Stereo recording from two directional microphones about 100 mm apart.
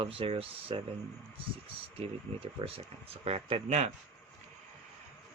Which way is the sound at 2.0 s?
65° right (ahead or behind).